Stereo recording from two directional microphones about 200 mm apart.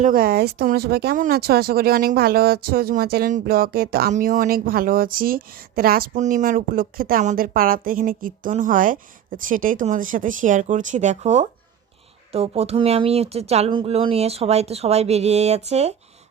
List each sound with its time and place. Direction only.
0.0 s speech: 45° right (ahead or behind)